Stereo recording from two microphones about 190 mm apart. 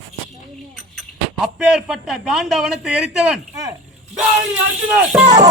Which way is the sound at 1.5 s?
5° right (ahead or behind).